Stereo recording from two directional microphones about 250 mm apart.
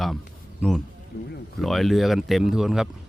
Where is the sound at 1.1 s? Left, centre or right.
Left.